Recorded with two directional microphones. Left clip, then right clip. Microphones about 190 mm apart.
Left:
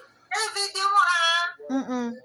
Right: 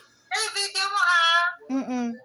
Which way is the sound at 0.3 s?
15° left (ahead or behind).